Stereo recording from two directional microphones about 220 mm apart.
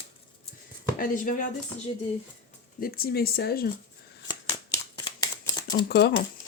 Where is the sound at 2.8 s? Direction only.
45° left (ahead or behind).